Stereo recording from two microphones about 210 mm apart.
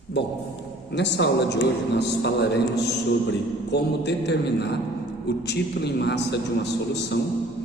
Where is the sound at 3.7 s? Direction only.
55° left (ahead or behind).